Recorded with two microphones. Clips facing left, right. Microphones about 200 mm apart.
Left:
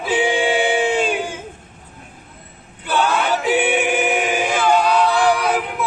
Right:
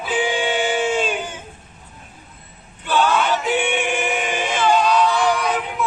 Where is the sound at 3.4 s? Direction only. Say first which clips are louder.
Left 3 dB; 5° left (ahead or behind).